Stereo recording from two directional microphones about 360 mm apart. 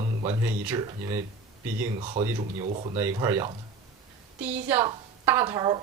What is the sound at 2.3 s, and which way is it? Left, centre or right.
Speech, centre.